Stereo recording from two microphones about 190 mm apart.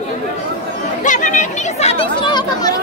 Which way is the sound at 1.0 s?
40° left (ahead or behind).